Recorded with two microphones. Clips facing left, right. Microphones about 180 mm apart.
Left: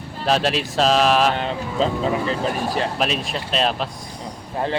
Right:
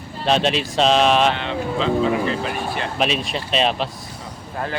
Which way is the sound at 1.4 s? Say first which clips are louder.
Left 1 dB; 40° left (ahead or behind).